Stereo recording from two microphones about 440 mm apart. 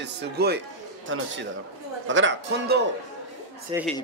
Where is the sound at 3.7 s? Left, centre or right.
Centre.